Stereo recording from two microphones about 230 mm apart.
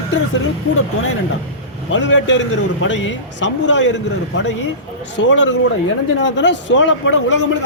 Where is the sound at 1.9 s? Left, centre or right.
Left.